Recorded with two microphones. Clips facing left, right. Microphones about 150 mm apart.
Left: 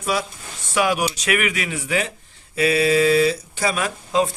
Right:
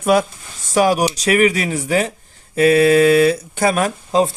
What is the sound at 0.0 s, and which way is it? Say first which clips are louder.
Speech: right 9 dB; 55° right (ahead or behind).